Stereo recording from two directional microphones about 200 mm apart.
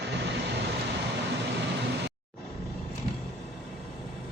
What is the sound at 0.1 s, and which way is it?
Vehicle, 60° right (ahead or behind).